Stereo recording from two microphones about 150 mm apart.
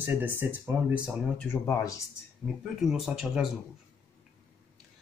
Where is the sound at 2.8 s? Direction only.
5° right (ahead or behind).